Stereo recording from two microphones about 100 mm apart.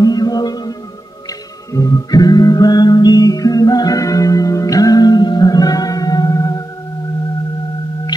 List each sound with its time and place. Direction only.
0.0 s music: 40° left (ahead or behind)